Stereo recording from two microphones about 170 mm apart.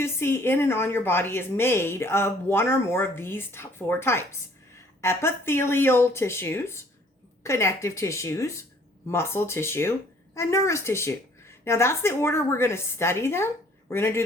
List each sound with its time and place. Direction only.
0.0 s a woman's voice: 15° left (ahead or behind)